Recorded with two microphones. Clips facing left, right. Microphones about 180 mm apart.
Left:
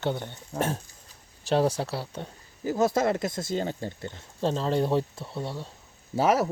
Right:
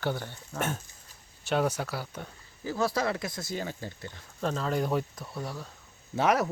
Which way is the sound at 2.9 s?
50° left (ahead or behind).